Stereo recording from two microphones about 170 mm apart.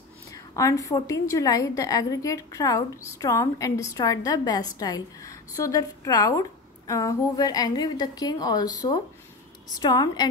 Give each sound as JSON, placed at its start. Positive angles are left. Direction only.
{"t": 0.3, "sound": "a woman's voice", "side_deg": 20}